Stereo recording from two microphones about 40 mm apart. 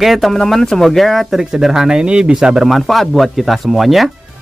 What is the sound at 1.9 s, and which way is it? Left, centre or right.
Speech, right.